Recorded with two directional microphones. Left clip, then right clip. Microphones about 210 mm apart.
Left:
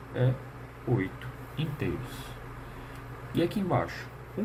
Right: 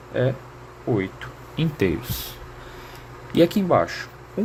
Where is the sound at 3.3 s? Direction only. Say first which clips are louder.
Right 11 dB; 55° right (ahead or behind).